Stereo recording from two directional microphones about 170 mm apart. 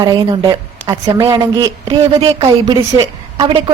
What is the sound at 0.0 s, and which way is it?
A woman's voice, 20° right (ahead or behind).